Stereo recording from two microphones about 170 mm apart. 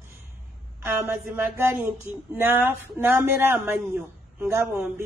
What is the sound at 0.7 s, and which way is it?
Speech, 15° right (ahead or behind).